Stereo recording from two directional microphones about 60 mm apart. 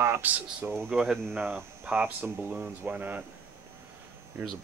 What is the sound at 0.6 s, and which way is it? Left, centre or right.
Speech, right.